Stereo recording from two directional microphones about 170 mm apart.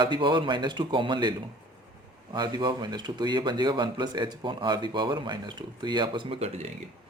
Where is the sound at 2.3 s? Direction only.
25° right (ahead or behind).